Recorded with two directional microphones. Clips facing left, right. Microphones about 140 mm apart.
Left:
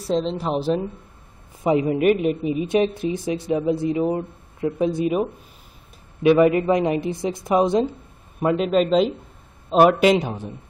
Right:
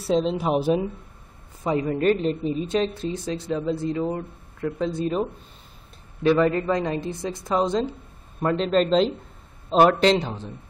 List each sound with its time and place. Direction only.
0.0 s a woman's voice: 5° right (ahead or behind)
1.6 s speech: 15° left (ahead or behind)